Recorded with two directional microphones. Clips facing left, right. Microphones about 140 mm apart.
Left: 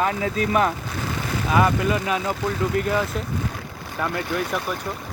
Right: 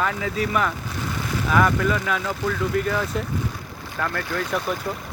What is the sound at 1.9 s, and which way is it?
Speech, 15° left (ahead or behind).